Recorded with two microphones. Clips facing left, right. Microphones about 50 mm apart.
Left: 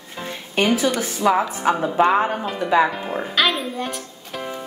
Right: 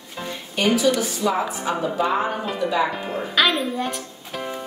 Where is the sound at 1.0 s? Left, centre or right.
Left.